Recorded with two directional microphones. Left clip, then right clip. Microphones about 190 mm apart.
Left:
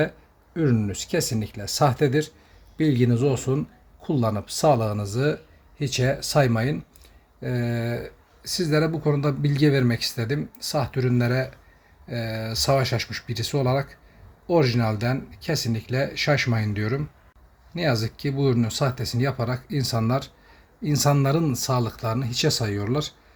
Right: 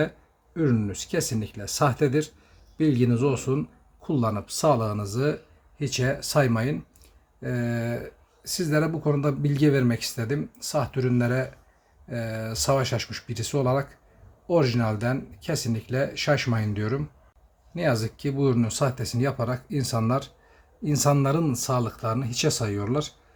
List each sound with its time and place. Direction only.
0.5 s speech: 10° left (ahead or behind)